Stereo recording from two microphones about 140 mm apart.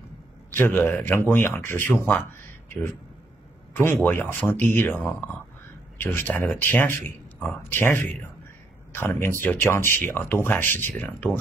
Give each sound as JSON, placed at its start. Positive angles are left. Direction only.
{"t": 0.6, "sound": "a man's voice", "side_deg": 15}